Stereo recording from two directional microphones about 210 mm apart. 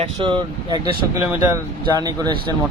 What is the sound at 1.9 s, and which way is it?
Speech, 20° right (ahead or behind).